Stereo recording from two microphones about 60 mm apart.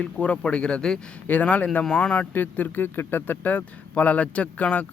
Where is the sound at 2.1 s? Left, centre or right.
Left.